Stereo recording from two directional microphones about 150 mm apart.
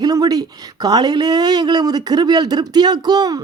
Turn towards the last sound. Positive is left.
turn(degrees=-25)  # may be behind; listen again after turning